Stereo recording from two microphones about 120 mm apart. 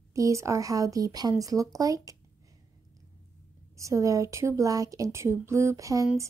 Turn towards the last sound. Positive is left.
turn(degrees=-25)  # may be behind; listen again after turning